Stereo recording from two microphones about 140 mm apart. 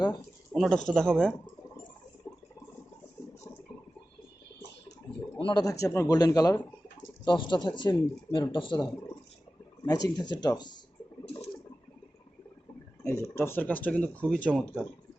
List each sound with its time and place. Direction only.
0.5 s speech: centre (ahead or behind)
2.3 s a sound: 30° left (ahead or behind)
5.5 s a man's voice: 25° left (ahead or behind)
13.0 s speech: 20° left (ahead or behind)